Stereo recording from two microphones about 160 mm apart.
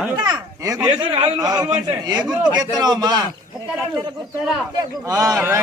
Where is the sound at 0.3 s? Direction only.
20° right (ahead or behind).